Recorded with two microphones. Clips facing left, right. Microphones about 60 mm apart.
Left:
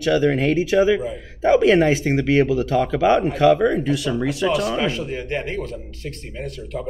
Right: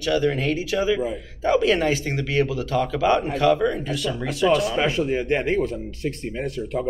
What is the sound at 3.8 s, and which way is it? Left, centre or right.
Speech, centre.